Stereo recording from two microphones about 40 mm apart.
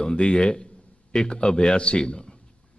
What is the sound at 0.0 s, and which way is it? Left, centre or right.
A man's voice, left.